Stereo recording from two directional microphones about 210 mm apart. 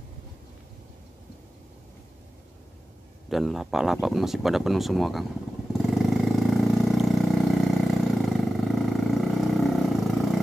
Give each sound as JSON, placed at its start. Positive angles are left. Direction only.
{"t": 3.3, "sound": "speech", "side_deg": 0}
{"t": 5.7, "sound": "vehicle", "side_deg": 0}
{"t": 8.3, "sound": "roar", "side_deg": 0}